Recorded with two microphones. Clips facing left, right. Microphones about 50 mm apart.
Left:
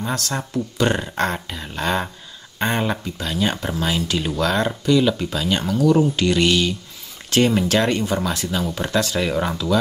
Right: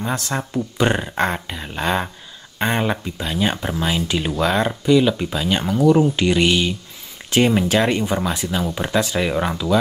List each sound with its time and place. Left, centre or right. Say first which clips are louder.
0.1 s speech: right 1 dB; right